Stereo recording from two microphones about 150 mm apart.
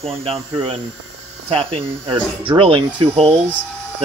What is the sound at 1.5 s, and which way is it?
Speech, 35° right (ahead or behind).